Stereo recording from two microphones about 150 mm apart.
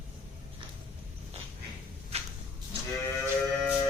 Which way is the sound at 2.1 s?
45° right (ahead or behind).